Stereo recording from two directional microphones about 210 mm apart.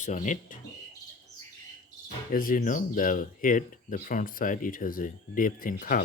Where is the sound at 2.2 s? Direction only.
40° left (ahead or behind).